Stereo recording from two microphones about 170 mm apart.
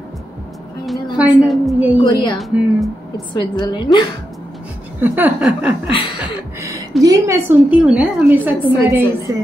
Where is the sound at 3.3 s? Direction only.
25° left (ahead or behind).